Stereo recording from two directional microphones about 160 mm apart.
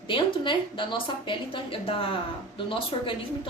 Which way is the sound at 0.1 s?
30° left (ahead or behind).